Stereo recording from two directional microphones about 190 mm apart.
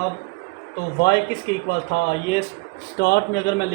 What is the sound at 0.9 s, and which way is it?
A man's voice, 60° left (ahead or behind).